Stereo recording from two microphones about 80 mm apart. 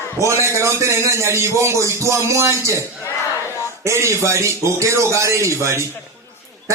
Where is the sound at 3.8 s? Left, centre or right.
Right.